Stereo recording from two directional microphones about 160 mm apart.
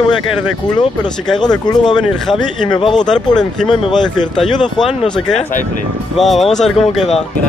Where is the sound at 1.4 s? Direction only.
25° left (ahead or behind).